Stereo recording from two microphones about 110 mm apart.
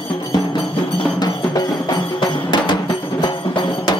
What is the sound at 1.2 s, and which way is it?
Music, 35° left (ahead or behind).